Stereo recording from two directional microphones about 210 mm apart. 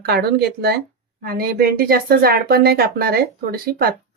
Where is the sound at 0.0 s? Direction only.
50° right (ahead or behind).